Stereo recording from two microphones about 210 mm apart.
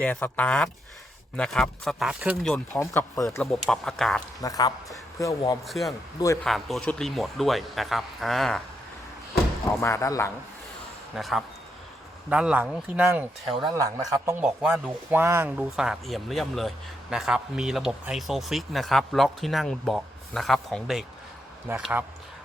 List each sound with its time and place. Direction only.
0.0 s speech: 10° left (ahead or behind)
2.7 s speech: 10° left (ahead or behind)
3.4 s speech: centre (ahead or behind)
4.4 s speech: 15° left (ahead or behind)
5.6 s speech: centre (ahead or behind)
6.1 s speech: 15° left (ahead or behind)
6.4 s speech: centre (ahead or behind)
9.8 s speech: 15° left (ahead or behind)
11.1 s a man's voice: centre (ahead or behind)